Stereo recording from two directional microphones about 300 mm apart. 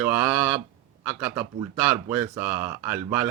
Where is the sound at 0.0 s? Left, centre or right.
Centre.